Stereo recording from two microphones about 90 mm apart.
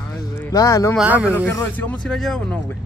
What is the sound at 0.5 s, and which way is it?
Speech, 40° left (ahead or behind).